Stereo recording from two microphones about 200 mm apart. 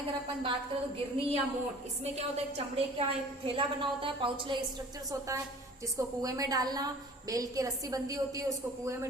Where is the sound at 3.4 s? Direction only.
25° right (ahead or behind).